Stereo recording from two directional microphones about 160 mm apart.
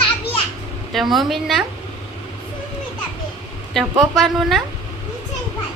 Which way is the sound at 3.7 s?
Centre (ahead or behind).